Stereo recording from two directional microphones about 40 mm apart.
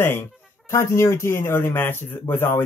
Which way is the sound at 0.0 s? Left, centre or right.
Left.